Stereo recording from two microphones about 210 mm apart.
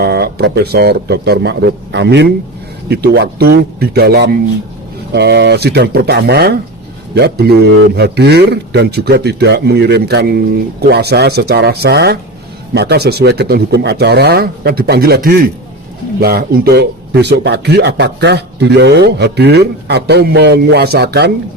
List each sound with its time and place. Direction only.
0.0 s speech: 50° right (ahead or behind)